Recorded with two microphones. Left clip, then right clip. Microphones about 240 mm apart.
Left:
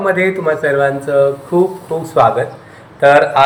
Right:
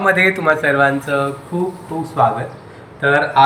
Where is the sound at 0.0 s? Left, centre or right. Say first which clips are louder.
Even; centre.